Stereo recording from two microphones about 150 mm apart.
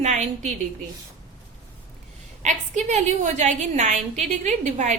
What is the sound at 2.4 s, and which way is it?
A woman's voice, 50° right (ahead or behind).